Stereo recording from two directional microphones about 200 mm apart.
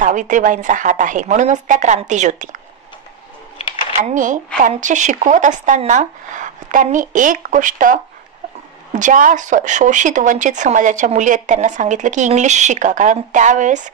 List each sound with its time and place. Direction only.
0.0 s speech: 40° right (ahead or behind)
4.0 s speech: 40° right (ahead or behind)